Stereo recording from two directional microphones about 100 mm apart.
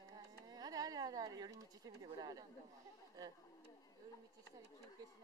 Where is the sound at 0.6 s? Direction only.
40° right (ahead or behind).